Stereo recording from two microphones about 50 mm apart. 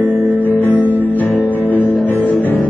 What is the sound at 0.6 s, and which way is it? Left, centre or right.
Music, left.